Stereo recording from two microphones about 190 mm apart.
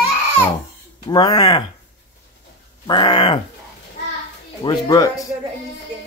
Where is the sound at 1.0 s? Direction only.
20° left (ahead or behind).